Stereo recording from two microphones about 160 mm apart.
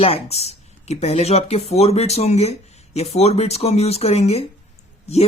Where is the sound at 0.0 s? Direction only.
40° left (ahead or behind).